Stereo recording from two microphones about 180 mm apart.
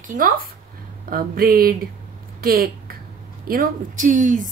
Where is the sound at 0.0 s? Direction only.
50° right (ahead or behind).